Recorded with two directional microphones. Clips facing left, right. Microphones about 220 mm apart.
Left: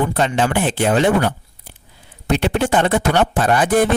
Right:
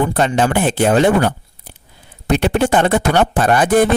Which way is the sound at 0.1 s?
45° right (ahead or behind).